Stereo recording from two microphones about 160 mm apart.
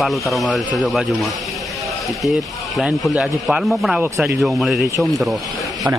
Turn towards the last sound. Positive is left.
turn(degrees=0)  # may be behind; listen again after turning